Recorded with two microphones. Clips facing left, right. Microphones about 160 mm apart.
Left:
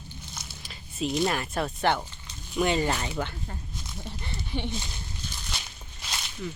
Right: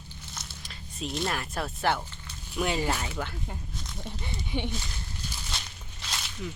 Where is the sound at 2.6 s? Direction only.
5° right (ahead or behind).